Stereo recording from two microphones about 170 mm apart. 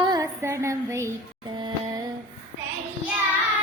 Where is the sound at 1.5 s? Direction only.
25° right (ahead or behind).